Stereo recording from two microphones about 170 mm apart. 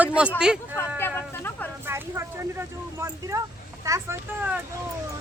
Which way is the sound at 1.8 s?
15° right (ahead or behind).